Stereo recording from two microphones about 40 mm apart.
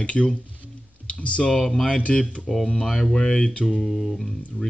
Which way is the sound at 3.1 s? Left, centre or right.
Centre.